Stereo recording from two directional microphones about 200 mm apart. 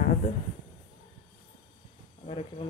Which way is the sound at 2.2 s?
30° left (ahead or behind).